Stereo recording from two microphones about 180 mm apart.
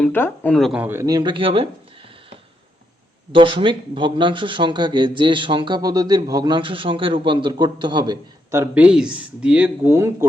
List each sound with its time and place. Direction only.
0.0 s speech: 10° left (ahead or behind); by 1.6 s 30° right (ahead or behind)
3.3 s speech: 30° right (ahead or behind)